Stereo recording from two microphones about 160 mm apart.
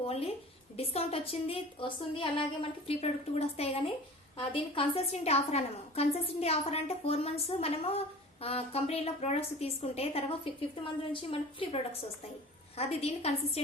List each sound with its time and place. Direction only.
0.0 s a woman's voice: 35° left (ahead or behind)